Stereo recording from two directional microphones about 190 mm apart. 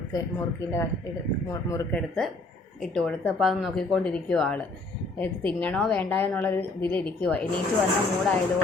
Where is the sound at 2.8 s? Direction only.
5° left (ahead or behind).